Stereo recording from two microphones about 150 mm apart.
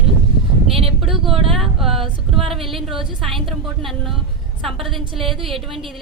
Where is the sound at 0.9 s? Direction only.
Centre (ahead or behind).